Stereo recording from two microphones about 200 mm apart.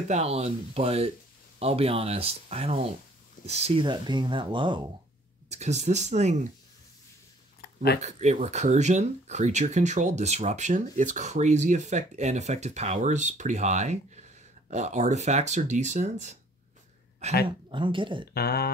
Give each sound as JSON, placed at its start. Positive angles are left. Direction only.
{"t": 0.1, "sound": "speech", "side_deg": -30}
{"t": 5.5, "sound": "speech", "side_deg": -35}
{"t": 7.6, "sound": "a sound", "side_deg": 55}
{"t": 8.0, "sound": "speech", "side_deg": -35}
{"t": 17.6, "sound": "speech", "side_deg": -25}
{"t": 18.3, "sound": "a sound", "side_deg": 50}